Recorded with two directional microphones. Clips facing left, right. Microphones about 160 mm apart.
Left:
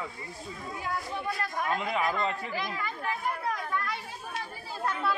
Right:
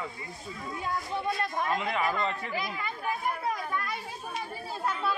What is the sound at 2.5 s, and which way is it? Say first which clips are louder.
Speech: even; 15° right (ahead or behind).